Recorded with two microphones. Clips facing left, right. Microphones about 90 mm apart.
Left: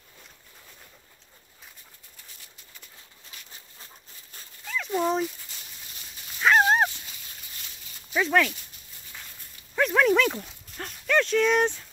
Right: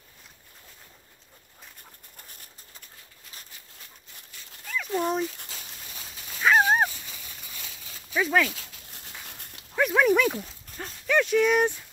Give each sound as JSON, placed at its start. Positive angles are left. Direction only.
{"t": 2.1, "sound": "dog", "side_deg": -50}
{"t": 4.6, "sound": "dog", "side_deg": 0}
{"t": 6.4, "sound": "dog", "side_deg": 0}
{"t": 8.2, "sound": "speech", "side_deg": -5}
{"t": 8.5, "sound": "dog", "side_deg": -80}
{"t": 9.8, "sound": "dog", "side_deg": -10}
{"t": 10.4, "sound": "a sound", "side_deg": -5}